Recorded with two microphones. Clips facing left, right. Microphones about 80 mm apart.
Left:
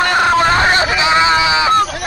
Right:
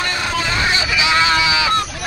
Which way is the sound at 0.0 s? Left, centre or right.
Left.